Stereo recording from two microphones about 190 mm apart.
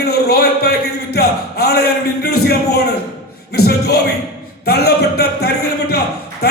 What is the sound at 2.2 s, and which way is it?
Music, 55° left (ahead or behind).